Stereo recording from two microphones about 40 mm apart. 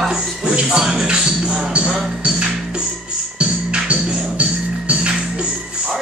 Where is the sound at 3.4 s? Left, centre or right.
Right.